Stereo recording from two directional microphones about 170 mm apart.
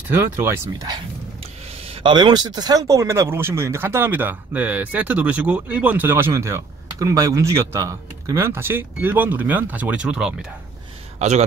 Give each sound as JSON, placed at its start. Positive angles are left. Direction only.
{"t": 0.1, "sound": "speech", "side_deg": -15}
{"t": 1.4, "sound": "speech", "side_deg": -35}
{"t": 11.1, "sound": "speech", "side_deg": -40}